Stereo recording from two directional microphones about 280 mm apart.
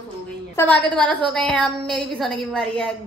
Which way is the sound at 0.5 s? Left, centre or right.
Centre.